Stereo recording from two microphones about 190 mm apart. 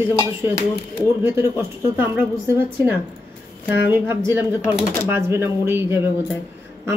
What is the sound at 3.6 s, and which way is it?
Speech, 10° right (ahead or behind).